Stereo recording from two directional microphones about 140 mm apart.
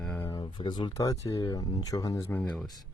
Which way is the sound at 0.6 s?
35° left (ahead or behind).